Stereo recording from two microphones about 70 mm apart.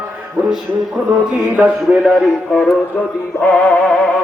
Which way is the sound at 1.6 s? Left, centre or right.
Centre.